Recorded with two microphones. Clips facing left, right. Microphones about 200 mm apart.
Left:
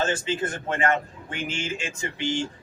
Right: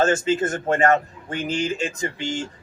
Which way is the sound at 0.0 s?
45° right (ahead or behind).